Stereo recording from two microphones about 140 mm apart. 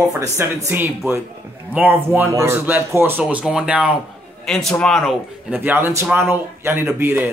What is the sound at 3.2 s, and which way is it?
Speech, 5° right (ahead or behind).